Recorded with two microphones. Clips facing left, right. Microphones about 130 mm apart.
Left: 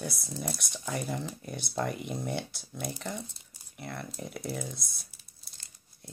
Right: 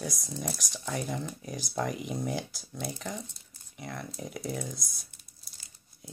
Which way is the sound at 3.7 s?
Centre (ahead or behind).